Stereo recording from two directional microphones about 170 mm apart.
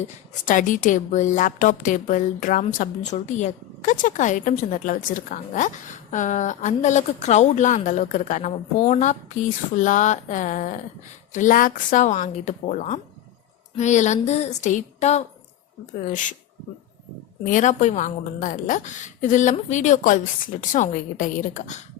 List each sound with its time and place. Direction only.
0.4 s a woman's voice: 50° left (ahead or behind)
17.4 s a woman's voice: 45° left (ahead or behind)